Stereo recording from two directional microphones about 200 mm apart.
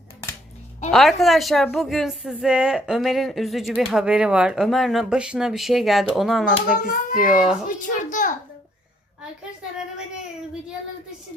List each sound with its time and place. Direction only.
0.9 s speech: centre (ahead or behind)
6.5 s a child's voice: 45° left (ahead or behind)
7.3 s speech: centre (ahead or behind)
7.7 s a child's voice: 40° left (ahead or behind)